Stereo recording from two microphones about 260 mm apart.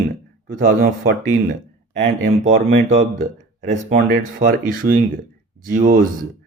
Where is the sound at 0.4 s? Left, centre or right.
Right.